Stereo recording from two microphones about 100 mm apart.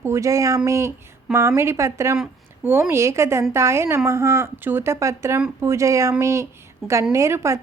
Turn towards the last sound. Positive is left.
turn(degrees=-30)  # may be behind; listen again after turning